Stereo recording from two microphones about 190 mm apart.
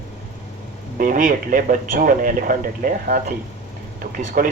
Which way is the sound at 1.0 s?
45° right (ahead or behind).